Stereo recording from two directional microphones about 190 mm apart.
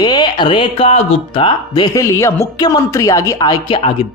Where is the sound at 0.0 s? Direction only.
20° left (ahead or behind).